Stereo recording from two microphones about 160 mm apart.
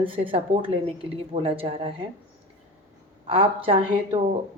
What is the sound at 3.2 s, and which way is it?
Speech, 35° right (ahead or behind).